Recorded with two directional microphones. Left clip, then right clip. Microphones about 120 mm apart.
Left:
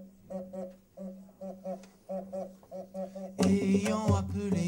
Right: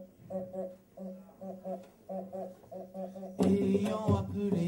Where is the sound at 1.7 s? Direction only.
20° left (ahead or behind).